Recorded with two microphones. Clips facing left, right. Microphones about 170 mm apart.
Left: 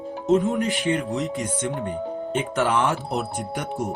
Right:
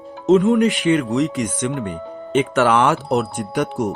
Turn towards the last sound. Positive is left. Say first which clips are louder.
# right 7 dB
turn(degrees=-90)